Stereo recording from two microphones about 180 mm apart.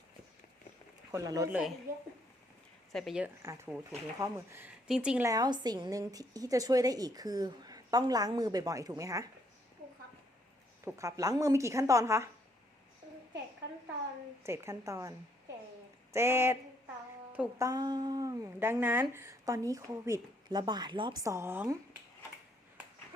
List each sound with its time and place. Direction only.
1.1 s a woman's voice: 20° right (ahead or behind)
1.5 s speech: 5° right (ahead or behind)
2.9 s speech: centre (ahead or behind)
3.4 s speech: 15° right (ahead or behind)
5.3 s a woman's voice: 20° right (ahead or behind)
10.8 s speech: 15° right (ahead or behind)
14.4 s speech: 15° right (ahead or behind)
16.1 s speech: 15° right (ahead or behind)
17.7 s speech: 25° right (ahead or behind)